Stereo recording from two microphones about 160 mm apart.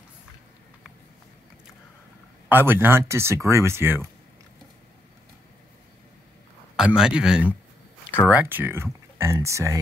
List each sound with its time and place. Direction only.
2.5 s speech: 15° right (ahead or behind)
6.8 s a man's voice: 5° right (ahead or behind)